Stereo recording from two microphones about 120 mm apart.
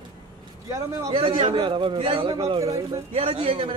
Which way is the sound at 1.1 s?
50° right (ahead or behind).